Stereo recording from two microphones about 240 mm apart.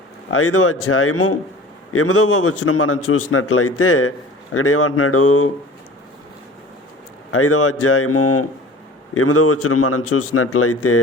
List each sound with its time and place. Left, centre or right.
0.3 s a man's voice: left
7.3 s a man's voice: left